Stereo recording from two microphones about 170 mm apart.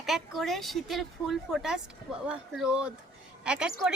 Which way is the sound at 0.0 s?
Centre (ahead or behind).